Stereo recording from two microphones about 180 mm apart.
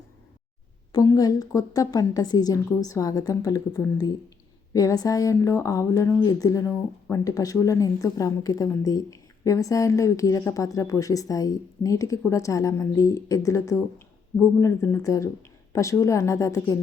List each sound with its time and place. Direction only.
0.9 s a woman's voice: 20° left (ahead or behind)